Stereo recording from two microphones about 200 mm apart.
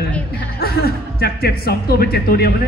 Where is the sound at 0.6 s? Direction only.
50° left (ahead or behind).